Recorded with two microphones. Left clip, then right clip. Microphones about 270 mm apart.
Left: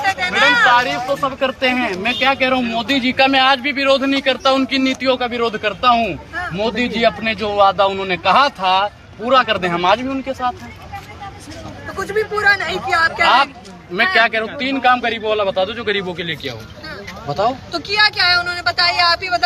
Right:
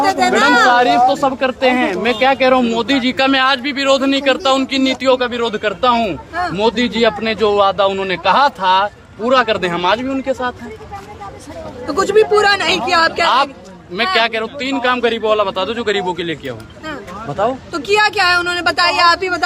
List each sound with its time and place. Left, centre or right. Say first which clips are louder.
0.7 s speech: right 4 dB; centre
11.9 s speech: right 8 dB; right
13.9 s speech: left 1 dB; centre
17.7 s speech: right 3 dB; right